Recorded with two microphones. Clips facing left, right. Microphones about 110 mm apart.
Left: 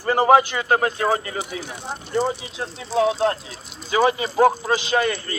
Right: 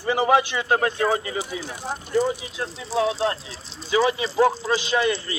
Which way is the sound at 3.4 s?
30° right (ahead or behind).